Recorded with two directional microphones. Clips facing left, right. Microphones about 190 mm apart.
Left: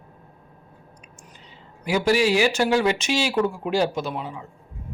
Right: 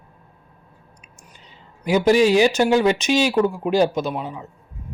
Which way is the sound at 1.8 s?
20° right (ahead or behind).